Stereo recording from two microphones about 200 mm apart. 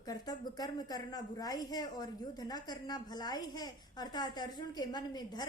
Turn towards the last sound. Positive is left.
turn(degrees=20)  # may be behind; listen again after turning